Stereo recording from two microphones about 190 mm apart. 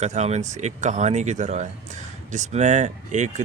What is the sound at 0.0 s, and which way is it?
Speech, 35° right (ahead or behind).